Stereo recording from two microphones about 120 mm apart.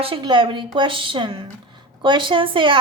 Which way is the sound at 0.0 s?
45° right (ahead or behind).